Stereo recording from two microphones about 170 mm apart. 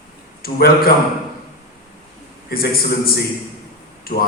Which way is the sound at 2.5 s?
60° left (ahead or behind).